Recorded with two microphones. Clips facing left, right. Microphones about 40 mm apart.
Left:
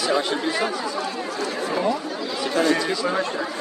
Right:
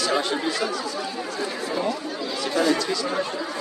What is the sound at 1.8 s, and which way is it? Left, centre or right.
Chatter, centre.